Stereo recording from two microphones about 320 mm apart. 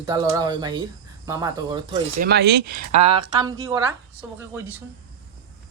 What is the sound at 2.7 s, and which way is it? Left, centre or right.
Speech, right.